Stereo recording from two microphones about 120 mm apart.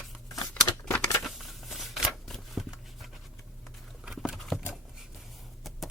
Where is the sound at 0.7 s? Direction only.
25° left (ahead or behind).